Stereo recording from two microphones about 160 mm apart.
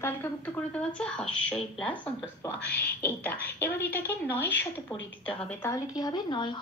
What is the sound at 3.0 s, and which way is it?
A woman's voice, 10° left (ahead or behind).